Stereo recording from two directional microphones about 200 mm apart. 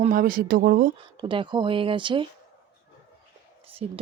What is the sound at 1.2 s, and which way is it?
Speech, 25° right (ahead or behind).